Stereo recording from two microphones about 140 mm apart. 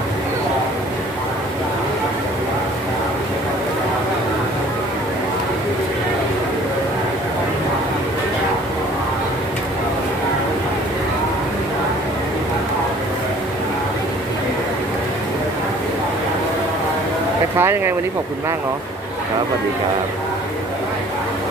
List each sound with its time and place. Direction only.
17.6 s speech: 20° right (ahead or behind)